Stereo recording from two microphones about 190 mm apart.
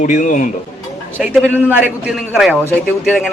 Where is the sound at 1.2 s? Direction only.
5° right (ahead or behind).